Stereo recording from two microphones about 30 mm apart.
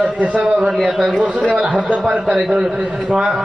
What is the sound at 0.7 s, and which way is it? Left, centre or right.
Speech, centre.